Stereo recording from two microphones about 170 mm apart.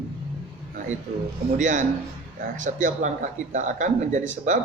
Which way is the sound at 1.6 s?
50° right (ahead or behind).